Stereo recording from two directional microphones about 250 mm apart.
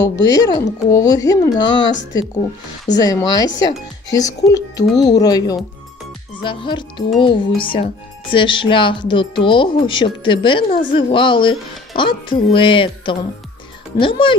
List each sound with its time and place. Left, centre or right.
0.0 s speech: centre
2.9 s speech: centre